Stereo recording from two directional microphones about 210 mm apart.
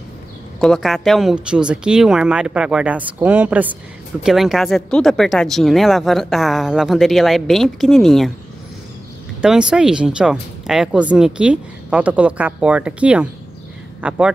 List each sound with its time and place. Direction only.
0.6 s speech: centre (ahead or behind)
9.4 s speech: 5° right (ahead or behind)